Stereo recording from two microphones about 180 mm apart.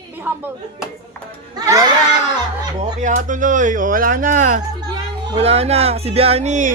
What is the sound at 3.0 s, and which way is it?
Speech, 45° right (ahead or behind).